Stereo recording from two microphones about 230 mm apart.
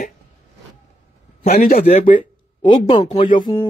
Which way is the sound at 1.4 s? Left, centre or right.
Left.